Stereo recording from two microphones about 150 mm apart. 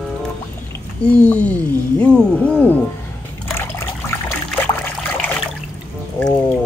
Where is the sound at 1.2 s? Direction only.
10° left (ahead or behind).